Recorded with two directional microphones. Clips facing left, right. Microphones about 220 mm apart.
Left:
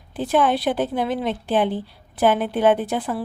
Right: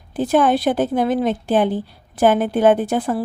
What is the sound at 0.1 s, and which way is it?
A woman's voice, 45° right (ahead or behind).